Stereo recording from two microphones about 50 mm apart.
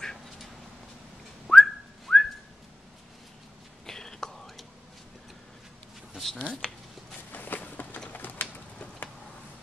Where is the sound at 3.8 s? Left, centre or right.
Centre.